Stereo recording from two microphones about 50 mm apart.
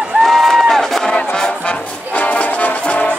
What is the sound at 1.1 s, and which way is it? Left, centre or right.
Music, left.